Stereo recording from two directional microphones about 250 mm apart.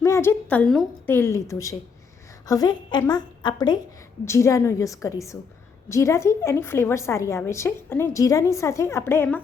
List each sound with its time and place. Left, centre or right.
0.0 s a woman's voice: centre